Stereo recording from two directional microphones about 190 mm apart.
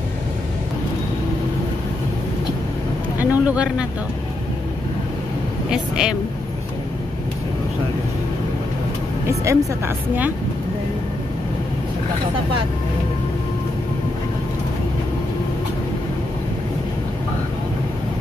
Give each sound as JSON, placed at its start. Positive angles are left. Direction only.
{"t": 3.2, "sound": "vehicle", "side_deg": -5}
{"t": 5.7, "sound": "speech", "side_deg": -5}
{"t": 9.3, "sound": "speech", "side_deg": -15}